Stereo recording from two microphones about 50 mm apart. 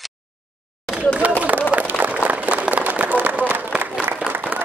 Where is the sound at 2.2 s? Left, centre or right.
Right.